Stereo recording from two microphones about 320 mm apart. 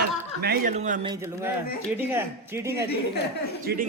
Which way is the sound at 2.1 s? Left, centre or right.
Centre.